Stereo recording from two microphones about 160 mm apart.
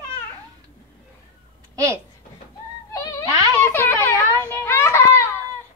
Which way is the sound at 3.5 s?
15° left (ahead or behind).